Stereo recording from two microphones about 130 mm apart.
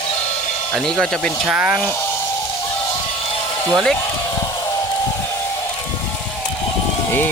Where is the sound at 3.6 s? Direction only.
5° left (ahead or behind).